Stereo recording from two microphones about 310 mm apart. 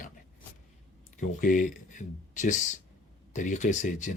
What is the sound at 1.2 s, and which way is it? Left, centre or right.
A man's voice, left.